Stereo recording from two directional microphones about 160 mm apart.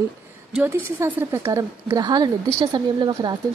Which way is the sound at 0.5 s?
15° right (ahead or behind).